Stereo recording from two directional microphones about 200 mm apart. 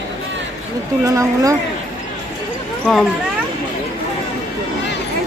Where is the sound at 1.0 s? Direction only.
15° right (ahead or behind).